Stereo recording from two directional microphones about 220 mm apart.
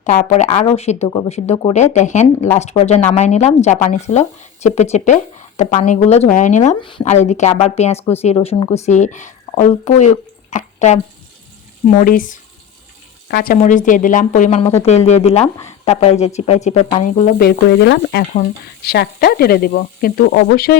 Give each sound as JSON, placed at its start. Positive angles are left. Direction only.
{"t": 0.0, "sound": "speech", "side_deg": 35}
{"t": 8.9, "sound": "speech", "side_deg": 35}